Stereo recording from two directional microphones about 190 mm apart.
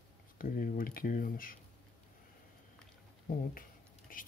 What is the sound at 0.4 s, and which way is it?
Speech, 50° left (ahead or behind).